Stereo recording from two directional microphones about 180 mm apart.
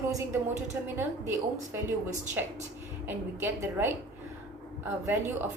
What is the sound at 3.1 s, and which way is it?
A woman's voice, 10° right (ahead or behind).